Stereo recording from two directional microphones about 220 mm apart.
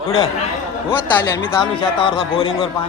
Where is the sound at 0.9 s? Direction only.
10° left (ahead or behind).